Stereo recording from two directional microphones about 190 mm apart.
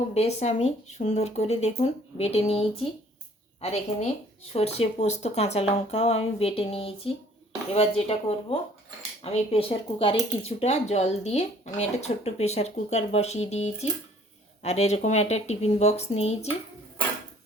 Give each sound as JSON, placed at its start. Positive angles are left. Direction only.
{"t": 0.1, "sound": "speech", "side_deg": 35}